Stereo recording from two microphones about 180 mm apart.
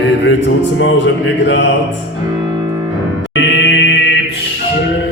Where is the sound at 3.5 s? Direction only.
90° left.